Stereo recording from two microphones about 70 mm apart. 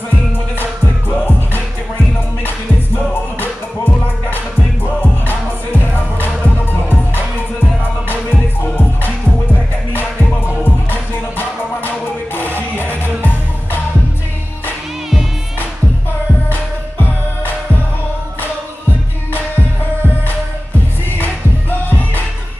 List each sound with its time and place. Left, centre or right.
1.1 s music: left
3.0 s music: left
8.1 s music: left
10.6 s music: left
21.2 s music: left